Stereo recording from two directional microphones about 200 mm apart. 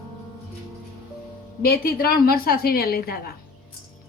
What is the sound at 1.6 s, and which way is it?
A woman's voice, 50° left (ahead or behind).